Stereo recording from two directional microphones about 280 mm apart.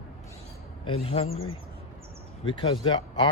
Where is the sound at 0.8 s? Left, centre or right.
Left.